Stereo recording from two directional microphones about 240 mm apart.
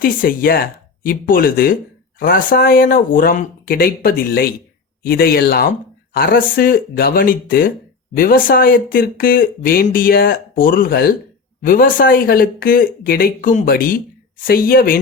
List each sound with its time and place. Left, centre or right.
0.0 s speech: left